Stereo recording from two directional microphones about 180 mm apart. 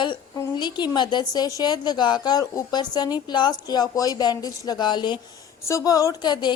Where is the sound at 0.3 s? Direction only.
25° left (ahead or behind).